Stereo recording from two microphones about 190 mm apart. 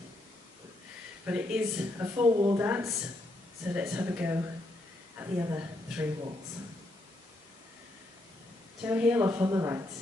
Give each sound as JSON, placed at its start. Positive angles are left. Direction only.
{"t": 1.2, "sound": "speech", "side_deg": -10}
{"t": 2.2, "sound": "speech", "side_deg": -20}
{"t": 8.8, "sound": "speech", "side_deg": -5}